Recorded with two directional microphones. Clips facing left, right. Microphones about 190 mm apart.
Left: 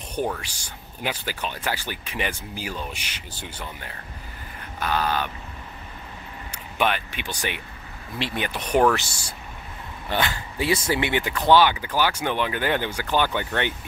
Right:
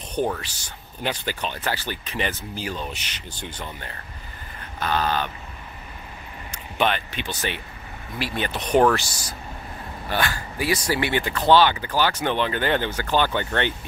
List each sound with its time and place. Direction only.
0.2 s speech: 20° right (ahead or behind)
1.0 s speech: 10° left (ahead or behind)
6.5 s speech: 10° left (ahead or behind)
8.9 s speech: 30° left (ahead or behind); by 13.7 s 10° left (ahead or behind)